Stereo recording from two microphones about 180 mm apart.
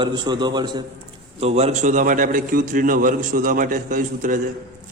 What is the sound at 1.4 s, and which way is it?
A man's voice, 35° right (ahead or behind).